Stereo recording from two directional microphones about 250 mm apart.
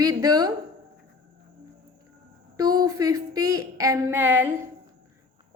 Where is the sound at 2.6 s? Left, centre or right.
Centre.